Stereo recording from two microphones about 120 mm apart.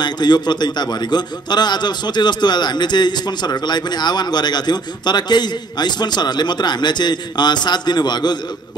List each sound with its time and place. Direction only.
0.0 s a man's voice: 35° left (ahead or behind)